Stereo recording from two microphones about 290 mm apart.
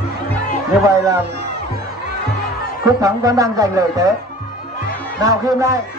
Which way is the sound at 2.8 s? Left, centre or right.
Centre.